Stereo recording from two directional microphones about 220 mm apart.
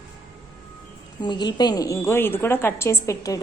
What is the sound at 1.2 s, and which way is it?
A woman's voice, 20° left (ahead or behind).